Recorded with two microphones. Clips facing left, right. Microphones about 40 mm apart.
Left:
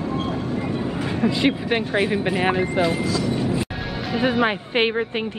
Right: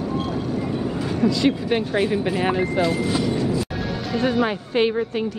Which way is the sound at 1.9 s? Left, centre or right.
Centre.